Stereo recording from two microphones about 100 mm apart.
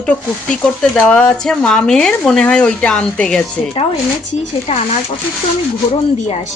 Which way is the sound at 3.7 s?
85° left.